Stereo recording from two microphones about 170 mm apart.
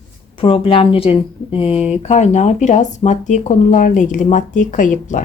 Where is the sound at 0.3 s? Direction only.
30° left (ahead or behind).